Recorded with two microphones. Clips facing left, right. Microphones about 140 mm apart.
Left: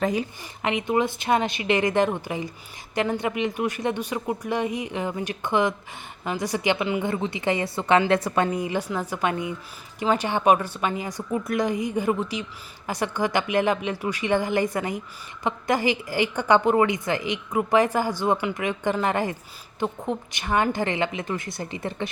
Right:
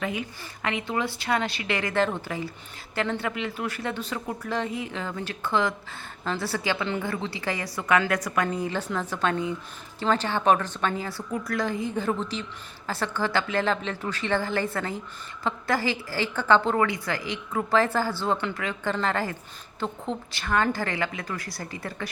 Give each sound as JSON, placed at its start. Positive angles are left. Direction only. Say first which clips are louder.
{"t": 0.0, "sound": "speech", "louder": "left 6 dB", "side_deg": 35}
{"t": 0.6, "sound": "a woman's voice", "louder": "left 5 dB", "side_deg": 20}
{"t": 8.4, "sound": "a woman's voice", "louder": "left 2 dB", "side_deg": 15}